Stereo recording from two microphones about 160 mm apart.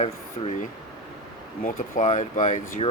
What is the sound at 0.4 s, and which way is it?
Speech, 40° left (ahead or behind).